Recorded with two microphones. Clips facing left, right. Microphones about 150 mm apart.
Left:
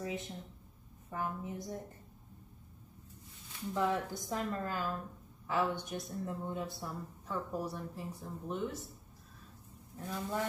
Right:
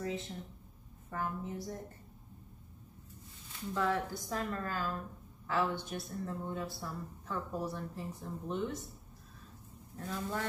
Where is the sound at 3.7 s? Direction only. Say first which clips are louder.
Even; 20° left (ahead or behind).